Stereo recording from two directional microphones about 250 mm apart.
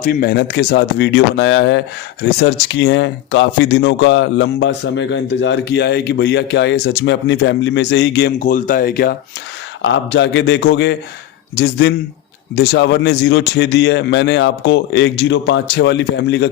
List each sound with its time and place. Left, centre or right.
0.0 s speech: left
9.8 s speech: left